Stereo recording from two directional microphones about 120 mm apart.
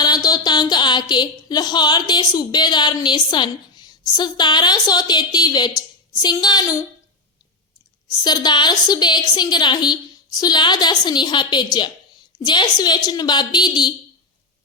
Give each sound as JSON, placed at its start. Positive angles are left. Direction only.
{"t": 0.0, "sound": "speech", "side_deg": 35}
{"t": 8.2, "sound": "a woman's voice", "side_deg": 35}